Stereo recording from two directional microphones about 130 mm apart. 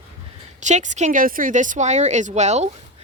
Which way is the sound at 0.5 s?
65° right (ahead or behind).